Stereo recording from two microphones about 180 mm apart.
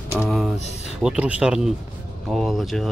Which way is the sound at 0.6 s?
40° left (ahead or behind).